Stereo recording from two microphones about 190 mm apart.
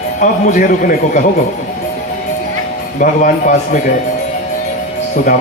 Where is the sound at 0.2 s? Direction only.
45° left (ahead or behind).